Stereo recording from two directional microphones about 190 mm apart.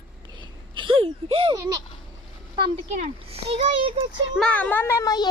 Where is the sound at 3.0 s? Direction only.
30° right (ahead or behind).